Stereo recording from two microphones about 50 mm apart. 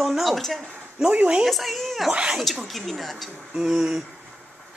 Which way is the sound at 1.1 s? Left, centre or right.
Right.